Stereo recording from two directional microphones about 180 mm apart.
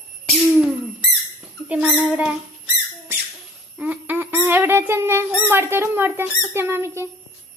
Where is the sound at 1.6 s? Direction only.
5° right (ahead or behind).